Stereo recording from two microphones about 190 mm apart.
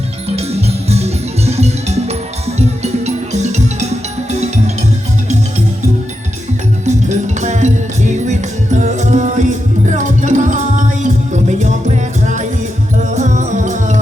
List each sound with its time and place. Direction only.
0.3 s music: 35° right (ahead or behind)
6.8 s music: 40° right (ahead or behind)